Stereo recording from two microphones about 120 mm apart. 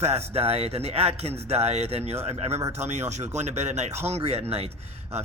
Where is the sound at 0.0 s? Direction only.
60° right (ahead or behind).